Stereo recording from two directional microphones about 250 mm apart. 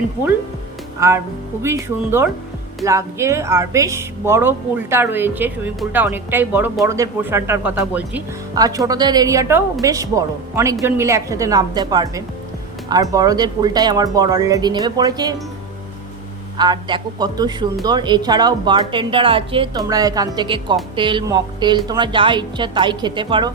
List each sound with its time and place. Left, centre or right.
0.9 s music: centre
1.6 s speech: centre
16.6 s speech: centre